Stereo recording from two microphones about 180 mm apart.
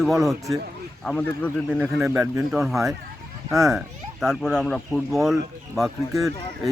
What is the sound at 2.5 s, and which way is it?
Speech, centre (ahead or behind).